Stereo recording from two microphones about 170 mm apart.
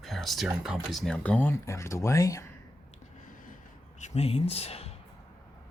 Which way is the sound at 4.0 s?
35° left (ahead or behind).